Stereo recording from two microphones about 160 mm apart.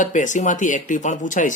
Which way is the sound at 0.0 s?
50° left (ahead or behind).